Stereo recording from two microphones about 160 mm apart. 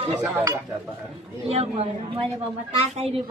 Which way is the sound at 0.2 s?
15° right (ahead or behind).